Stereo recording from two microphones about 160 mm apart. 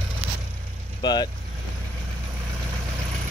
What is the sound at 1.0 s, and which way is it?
Speech, 25° left (ahead or behind).